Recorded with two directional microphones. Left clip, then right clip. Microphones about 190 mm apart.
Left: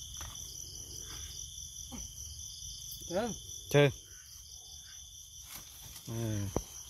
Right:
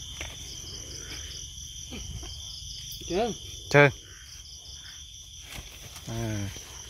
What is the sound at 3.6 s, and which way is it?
Speech, 20° left (ahead or behind).